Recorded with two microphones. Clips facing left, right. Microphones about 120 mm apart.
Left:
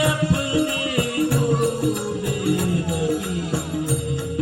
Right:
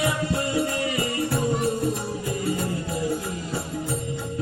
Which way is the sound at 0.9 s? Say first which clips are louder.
Left 4 dB; 65° left (ahead or behind).